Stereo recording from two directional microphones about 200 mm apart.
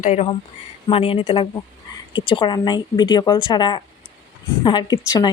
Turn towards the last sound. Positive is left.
turn(degrees=20)  # may be behind; listen again after turning